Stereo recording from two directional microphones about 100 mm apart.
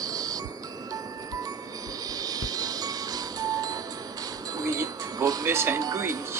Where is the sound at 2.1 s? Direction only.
40° right (ahead or behind).